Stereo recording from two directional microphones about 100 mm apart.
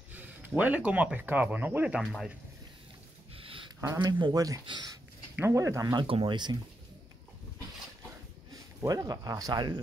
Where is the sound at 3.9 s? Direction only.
40° right (ahead or behind).